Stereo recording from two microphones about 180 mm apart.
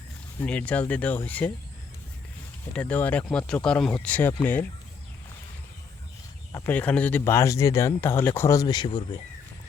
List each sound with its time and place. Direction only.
0.3 s speech: 10° left (ahead or behind)
2.7 s speech: 10° left (ahead or behind)
6.5 s speech: 10° left (ahead or behind); by 9.2 s 25° left (ahead or behind)